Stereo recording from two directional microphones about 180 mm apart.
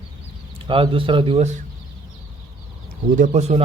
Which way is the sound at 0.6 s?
30° right (ahead or behind).